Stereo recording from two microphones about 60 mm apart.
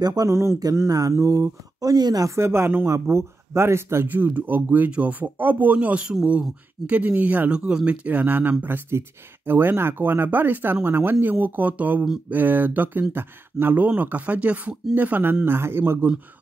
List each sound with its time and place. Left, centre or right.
0.0 s speech: right
0.3 s speech: right
0.8 s speech: right
1.2 s speech: right
2.3 s speech: right
4.1 s speech: right
15.4 s speech: right